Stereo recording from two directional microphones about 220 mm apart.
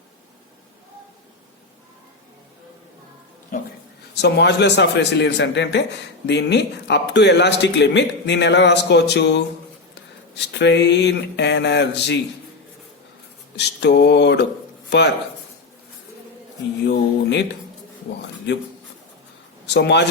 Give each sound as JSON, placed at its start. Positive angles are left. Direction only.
{"t": 4.1, "sound": "speech", "side_deg": 50}
{"t": 13.6, "sound": "speech", "side_deg": 50}
{"t": 16.8, "sound": "speech", "side_deg": 50}
{"t": 18.5, "sound": "speech", "side_deg": 50}
{"t": 19.6, "sound": "speech", "side_deg": 50}